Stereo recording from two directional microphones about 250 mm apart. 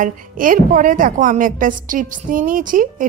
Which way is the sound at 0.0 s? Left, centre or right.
Right.